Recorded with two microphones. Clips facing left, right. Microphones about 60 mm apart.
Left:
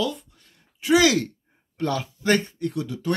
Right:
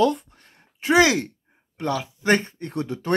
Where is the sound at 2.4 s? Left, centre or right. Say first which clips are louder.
Left 1 dB; right.